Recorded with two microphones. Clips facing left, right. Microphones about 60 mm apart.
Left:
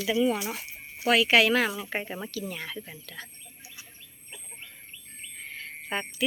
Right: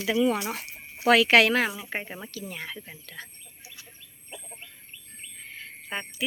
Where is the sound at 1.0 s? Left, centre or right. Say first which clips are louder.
Right 3 dB; right.